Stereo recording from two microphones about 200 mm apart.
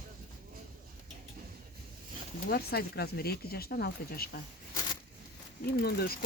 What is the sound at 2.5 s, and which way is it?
Speech, 50° left (ahead or behind).